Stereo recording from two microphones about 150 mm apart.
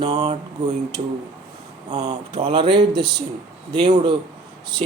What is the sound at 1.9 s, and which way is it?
Speech, 35° right (ahead or behind).